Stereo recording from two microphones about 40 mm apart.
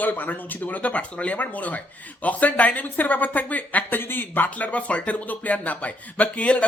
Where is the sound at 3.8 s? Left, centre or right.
Left.